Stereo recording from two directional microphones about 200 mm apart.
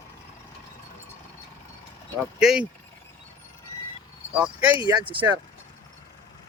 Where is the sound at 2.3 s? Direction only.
5° right (ahead or behind).